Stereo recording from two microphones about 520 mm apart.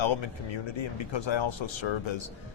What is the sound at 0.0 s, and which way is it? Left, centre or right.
Speech, left.